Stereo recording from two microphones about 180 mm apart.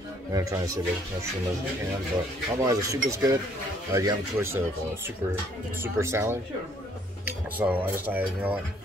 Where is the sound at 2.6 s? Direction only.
20° right (ahead or behind).